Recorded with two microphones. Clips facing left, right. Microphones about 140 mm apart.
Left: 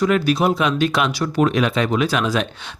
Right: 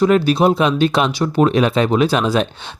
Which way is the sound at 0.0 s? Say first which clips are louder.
Right 4 dB; 25° right (ahead or behind).